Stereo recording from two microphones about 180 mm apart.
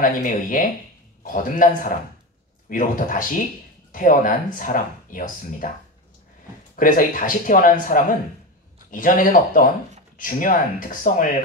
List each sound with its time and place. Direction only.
0.0 s speech: 50° left (ahead or behind)
6.8 s speech: 45° left (ahead or behind)